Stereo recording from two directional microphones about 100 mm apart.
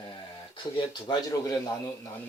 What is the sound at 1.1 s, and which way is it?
Speech, 45° left (ahead or behind).